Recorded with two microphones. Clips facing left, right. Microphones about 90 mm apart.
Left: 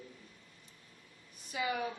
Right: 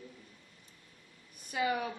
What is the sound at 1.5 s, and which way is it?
Speech, 50° right (ahead or behind).